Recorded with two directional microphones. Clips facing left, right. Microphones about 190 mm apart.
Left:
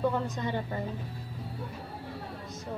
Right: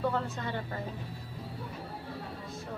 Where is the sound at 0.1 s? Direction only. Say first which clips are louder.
Left 2 dB; 15° left (ahead or behind).